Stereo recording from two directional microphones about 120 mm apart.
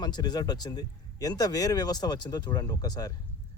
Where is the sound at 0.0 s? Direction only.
35° left (ahead or behind).